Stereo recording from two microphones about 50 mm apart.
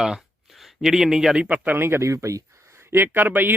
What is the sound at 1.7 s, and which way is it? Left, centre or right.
Speech, right.